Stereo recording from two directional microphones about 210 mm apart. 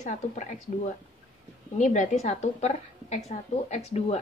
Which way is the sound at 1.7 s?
35° left (ahead or behind).